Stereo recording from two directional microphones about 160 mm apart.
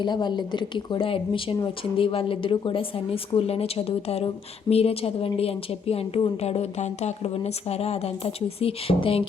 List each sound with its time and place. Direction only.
0.0 s a woman's voice: 30° left (ahead or behind)